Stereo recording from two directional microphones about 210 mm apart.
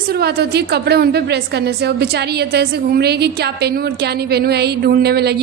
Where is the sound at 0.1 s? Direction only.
50° right (ahead or behind).